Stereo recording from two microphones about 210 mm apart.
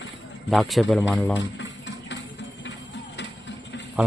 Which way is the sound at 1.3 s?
60° left (ahead or behind).